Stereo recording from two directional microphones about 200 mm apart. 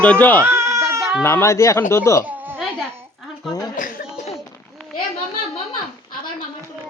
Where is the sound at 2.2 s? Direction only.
10° right (ahead or behind).